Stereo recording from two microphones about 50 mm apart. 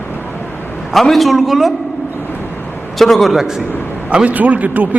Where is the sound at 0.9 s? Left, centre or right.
Centre.